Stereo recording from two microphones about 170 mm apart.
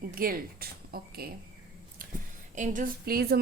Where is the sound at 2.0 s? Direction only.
55° right (ahead or behind).